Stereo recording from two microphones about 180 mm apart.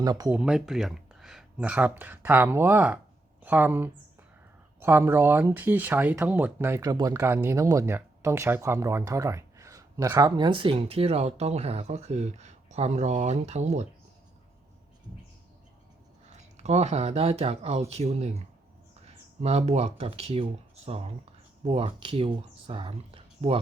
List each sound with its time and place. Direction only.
0.0 s speech: 20° right (ahead or behind)
0.3 s speech: 5° right (ahead or behind); by 13.8 s 40° right (ahead or behind)
16.3 s speech: 40° right (ahead or behind)